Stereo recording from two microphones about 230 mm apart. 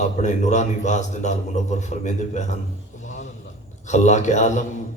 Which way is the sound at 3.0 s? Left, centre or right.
Left.